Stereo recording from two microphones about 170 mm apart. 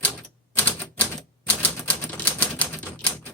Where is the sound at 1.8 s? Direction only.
10° left (ahead or behind).